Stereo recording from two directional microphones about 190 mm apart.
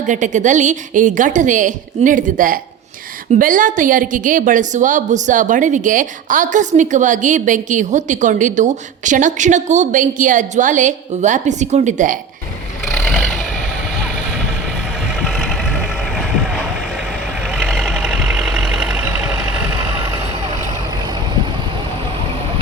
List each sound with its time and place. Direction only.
0.1 s a woman's voice: 40° right (ahead or behind)
15.1 s vehicle: centre (ahead or behind)